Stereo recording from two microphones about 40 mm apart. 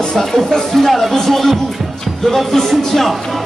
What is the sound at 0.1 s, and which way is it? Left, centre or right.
Speech, centre.